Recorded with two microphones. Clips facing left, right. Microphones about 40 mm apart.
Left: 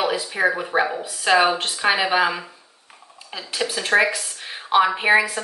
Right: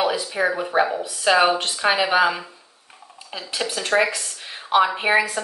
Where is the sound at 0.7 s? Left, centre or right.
Centre.